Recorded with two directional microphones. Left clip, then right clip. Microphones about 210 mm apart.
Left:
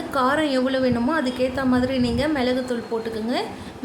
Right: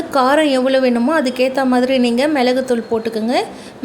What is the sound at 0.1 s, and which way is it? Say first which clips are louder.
A woman's voice: right 7 dB; 30° right (ahead or behind).